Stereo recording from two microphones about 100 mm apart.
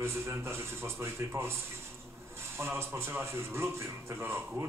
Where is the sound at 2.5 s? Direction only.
25° right (ahead or behind).